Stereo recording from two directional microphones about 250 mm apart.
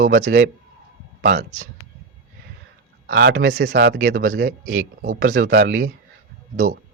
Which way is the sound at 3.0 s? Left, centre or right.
Right.